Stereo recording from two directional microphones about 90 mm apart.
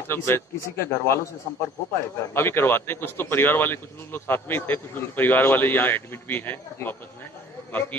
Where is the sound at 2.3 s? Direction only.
25° left (ahead or behind).